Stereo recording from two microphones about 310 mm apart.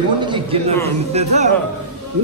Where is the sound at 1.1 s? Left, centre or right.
Right.